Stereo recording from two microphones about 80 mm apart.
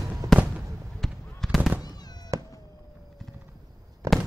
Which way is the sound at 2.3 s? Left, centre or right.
Right.